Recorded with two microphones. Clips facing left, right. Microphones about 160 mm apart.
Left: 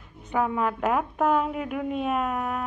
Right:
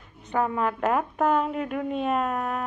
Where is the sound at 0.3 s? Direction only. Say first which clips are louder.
Even; 5° left (ahead or behind).